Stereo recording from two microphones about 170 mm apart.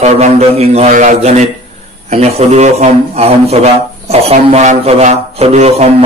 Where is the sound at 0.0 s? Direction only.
40° right (ahead or behind).